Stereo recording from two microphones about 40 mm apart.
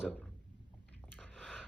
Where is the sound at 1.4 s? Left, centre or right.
Centre.